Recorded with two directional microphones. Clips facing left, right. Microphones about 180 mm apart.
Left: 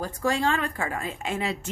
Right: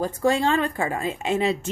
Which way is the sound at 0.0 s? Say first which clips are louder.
Right 4 dB; 25° right (ahead or behind).